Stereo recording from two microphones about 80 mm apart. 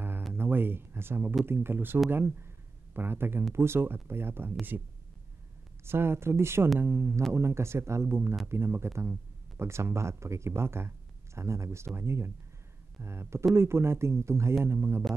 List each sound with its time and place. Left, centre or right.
0.3 s speech: right
5.9 s speech: right